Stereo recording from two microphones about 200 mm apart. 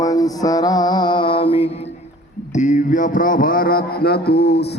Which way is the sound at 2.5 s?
40° left (ahead or behind).